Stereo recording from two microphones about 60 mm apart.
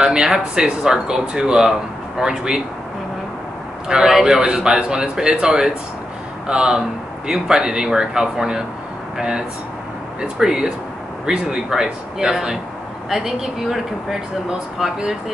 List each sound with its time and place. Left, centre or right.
0.0 s speech: centre
3.9 s speech: centre
10.2 s a woman's voice: centre